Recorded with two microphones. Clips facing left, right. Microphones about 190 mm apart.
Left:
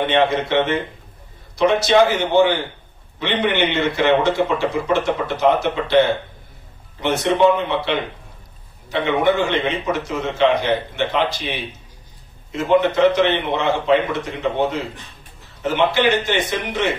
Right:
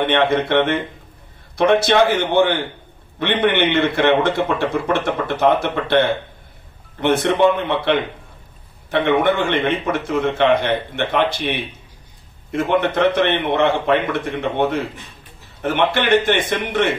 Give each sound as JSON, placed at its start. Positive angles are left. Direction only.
{"t": 0.1, "sound": "a man's voice", "side_deg": -55}
{"t": 8.9, "sound": "a man's voice", "side_deg": -55}